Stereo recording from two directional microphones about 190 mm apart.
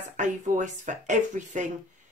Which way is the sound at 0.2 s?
40° right (ahead or behind).